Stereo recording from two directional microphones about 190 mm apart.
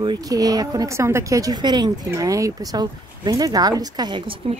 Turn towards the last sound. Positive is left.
turn(degrees=-25)  # may be behind; listen again after turning